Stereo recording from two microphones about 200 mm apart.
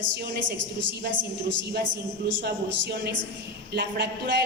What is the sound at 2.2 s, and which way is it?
Speech, 55° right (ahead or behind).